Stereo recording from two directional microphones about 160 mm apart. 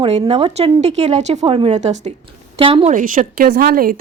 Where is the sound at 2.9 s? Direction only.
55° right (ahead or behind).